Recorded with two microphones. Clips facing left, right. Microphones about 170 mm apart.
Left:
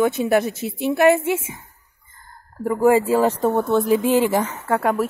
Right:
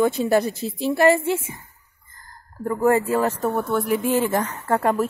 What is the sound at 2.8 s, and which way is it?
Speech, 15° left (ahead or behind).